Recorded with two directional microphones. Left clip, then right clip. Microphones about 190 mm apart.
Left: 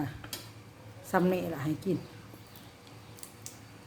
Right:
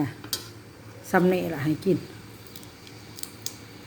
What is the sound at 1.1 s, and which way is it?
Speech, 10° right (ahead or behind).